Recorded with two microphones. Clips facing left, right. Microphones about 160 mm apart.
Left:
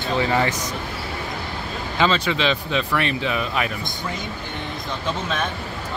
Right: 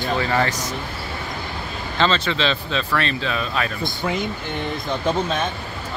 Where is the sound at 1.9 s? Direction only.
10° left (ahead or behind).